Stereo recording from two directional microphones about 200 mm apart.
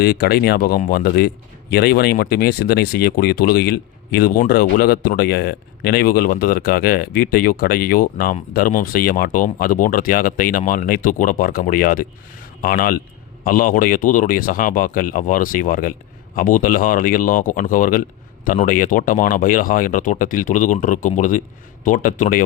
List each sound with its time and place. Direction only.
0.0 s speech: 50° left (ahead or behind)